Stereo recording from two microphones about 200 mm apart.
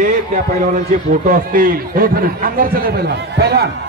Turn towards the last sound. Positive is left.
turn(degrees=-55)  # may be behind; listen again after turning